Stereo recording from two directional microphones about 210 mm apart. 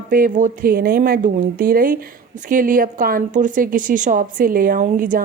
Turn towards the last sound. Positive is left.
turn(degrees=-40)  # may be behind; listen again after turning